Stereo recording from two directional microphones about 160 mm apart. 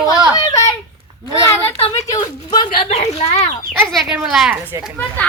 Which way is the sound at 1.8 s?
40° left (ahead or behind).